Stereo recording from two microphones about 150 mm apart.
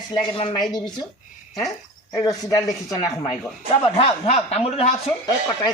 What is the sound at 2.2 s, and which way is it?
Speech, 25° left (ahead or behind).